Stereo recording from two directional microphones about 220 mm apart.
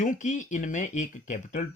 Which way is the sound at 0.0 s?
35° left (ahead or behind).